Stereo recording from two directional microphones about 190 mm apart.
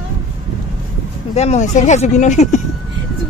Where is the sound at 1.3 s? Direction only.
35° left (ahead or behind).